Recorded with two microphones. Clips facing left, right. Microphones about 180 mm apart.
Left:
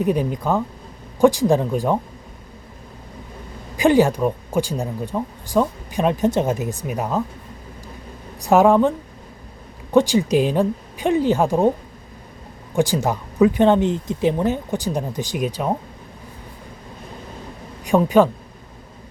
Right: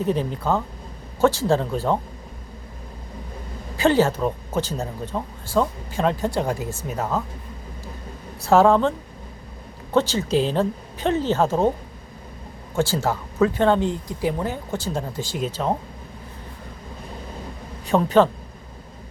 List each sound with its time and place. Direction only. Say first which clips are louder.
0.0 s speech: left 3 dB; 15° left (ahead or behind)
3.8 s speech: left 3 dB; 15° left (ahead or behind)
8.4 s speech: left 2 dB; 15° left (ahead or behind)
9.9 s speech: left 4 dB; 15° left (ahead or behind)
12.7 s speech: left 3 dB; 15° left (ahead or behind)
17.8 s a man's voice: left 2 dB; 10° left (ahead or behind)